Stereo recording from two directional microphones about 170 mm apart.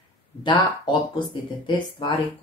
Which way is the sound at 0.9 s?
30° left (ahead or behind).